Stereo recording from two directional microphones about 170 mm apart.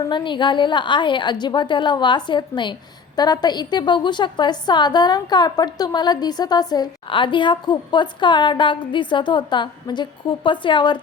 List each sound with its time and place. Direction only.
0.1 s a woman's voice: 30° left (ahead or behind)